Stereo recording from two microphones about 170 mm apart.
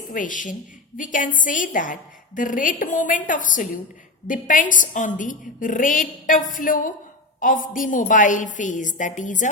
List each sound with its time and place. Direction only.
0.1 s a woman's voice: 50° left (ahead or behind)